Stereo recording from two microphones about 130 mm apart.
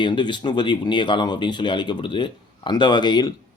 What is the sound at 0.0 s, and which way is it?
Speech, 35° left (ahead or behind).